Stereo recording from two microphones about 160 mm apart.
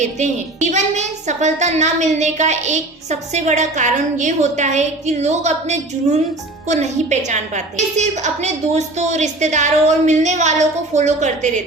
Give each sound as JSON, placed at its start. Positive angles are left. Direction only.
{"t": 0.0, "sound": "a woman's voice", "side_deg": -50}